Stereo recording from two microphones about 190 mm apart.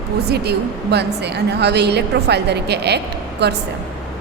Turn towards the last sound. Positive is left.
turn(degrees=-60)  # may be behind; listen again after turning